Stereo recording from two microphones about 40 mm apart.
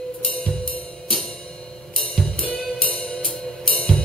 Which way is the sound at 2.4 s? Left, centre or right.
Left.